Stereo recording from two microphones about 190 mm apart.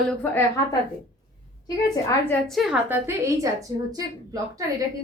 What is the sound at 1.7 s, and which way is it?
Speech, 20° left (ahead or behind).